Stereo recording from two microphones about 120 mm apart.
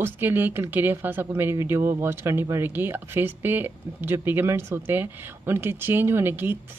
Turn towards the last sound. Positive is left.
turn(degrees=-15)  # may be behind; listen again after turning